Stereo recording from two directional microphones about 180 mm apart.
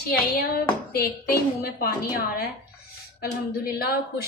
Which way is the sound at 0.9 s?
60° left (ahead or behind).